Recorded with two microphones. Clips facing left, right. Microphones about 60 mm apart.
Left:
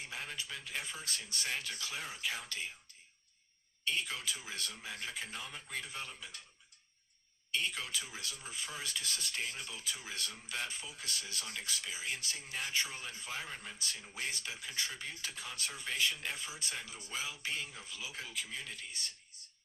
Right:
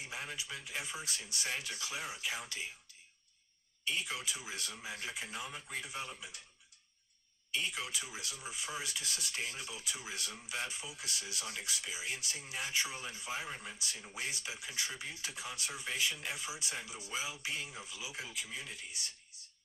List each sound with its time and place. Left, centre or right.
0.0 s speech: centre
3.8 s speech: centre
7.5 s speech: centre